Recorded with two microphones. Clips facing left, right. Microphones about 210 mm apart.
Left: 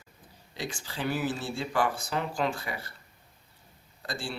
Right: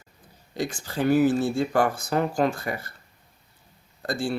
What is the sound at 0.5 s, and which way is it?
Speech, 45° right (ahead or behind).